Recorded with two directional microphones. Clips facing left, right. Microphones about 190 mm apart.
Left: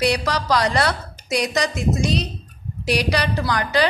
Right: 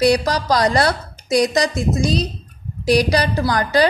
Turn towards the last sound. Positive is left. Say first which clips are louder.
# right 4 dB
turn(degrees=-40)  # may be behind; listen again after turning